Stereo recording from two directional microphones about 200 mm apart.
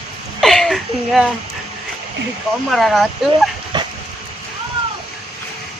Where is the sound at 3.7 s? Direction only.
20° right (ahead or behind).